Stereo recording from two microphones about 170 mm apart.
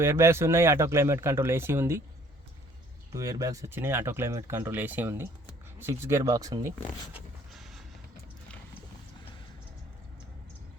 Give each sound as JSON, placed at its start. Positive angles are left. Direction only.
{"t": 0.0, "sound": "speech", "side_deg": -15}
{"t": 3.1, "sound": "speech", "side_deg": -20}
{"t": 7.5, "sound": "a sound", "side_deg": 0}